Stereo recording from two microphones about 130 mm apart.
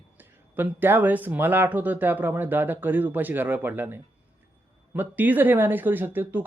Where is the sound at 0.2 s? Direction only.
15° right (ahead or behind).